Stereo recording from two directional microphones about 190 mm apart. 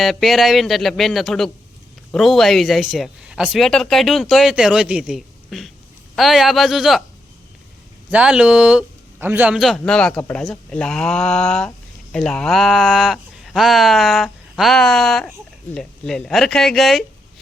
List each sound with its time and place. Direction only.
0.0 s a man's voice: centre (ahead or behind)
8.1 s a man's voice: 5° right (ahead or behind)